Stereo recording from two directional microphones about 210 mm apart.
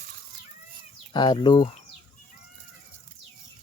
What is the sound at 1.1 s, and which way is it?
Speech, 20° left (ahead or behind).